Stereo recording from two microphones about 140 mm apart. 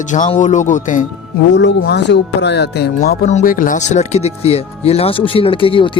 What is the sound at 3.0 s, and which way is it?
Speech, 65° left (ahead or behind).